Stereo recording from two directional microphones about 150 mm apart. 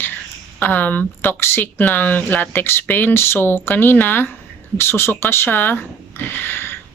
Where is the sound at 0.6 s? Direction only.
10° left (ahead or behind).